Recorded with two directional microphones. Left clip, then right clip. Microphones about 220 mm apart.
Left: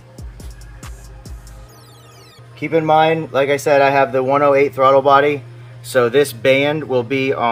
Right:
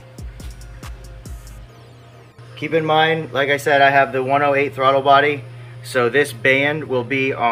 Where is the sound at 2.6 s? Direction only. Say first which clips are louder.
Left 3 dB; 45° left (ahead or behind).